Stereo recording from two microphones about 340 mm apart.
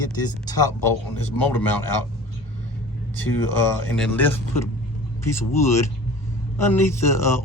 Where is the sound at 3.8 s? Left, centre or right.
Centre.